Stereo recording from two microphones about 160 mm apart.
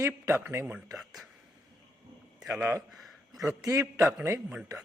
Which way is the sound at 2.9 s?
Centre (ahead or behind).